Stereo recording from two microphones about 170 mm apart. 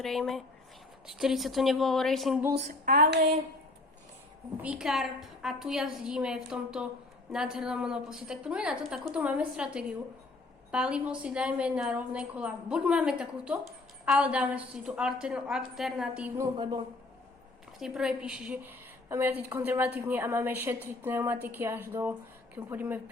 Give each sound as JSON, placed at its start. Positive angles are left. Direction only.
{"t": 0.0, "sound": "a woman's voice", "side_deg": 0}
{"t": 2.8, "sound": "a sound", "side_deg": -60}
{"t": 4.6, "sound": "a woman's voice", "side_deg": -5}
{"t": 17.7, "sound": "a woman's voice", "side_deg": -5}